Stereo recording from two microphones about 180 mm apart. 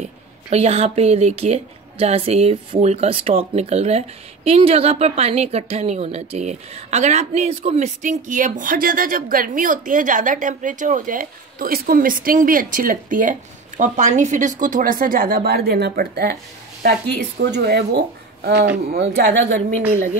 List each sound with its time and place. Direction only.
0.0 s a woman's voice: 35° right (ahead or behind); by 19.4 s 70° right (ahead or behind)